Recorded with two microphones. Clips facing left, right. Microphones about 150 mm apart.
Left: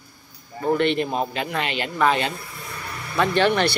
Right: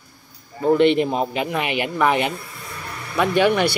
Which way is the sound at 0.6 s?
20° right (ahead or behind).